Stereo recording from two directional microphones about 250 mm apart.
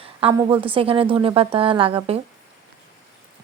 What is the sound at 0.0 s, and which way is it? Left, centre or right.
Speech, right.